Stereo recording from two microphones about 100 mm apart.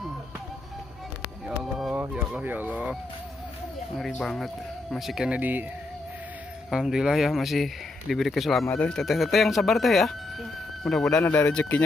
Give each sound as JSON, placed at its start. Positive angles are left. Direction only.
{"t": 1.6, "sound": "fowl", "side_deg": -5}
{"t": 2.0, "sound": "speech", "side_deg": -15}
{"t": 4.0, "sound": "speech", "side_deg": 5}
{"t": 5.4, "sound": "speech", "side_deg": -15}
{"t": 6.7, "sound": "speech", "side_deg": -5}